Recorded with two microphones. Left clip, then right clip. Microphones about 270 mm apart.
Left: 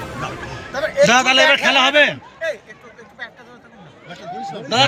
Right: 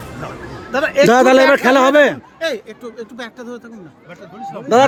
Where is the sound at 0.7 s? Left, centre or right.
Right.